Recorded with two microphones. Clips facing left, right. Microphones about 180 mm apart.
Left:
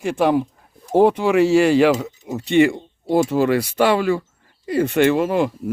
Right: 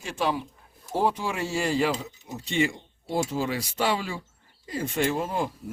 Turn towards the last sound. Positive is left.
turn(degrees=75)  # may be behind; listen again after turning